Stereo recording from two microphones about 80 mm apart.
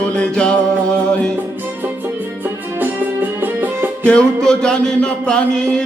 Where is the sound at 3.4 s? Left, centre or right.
Right.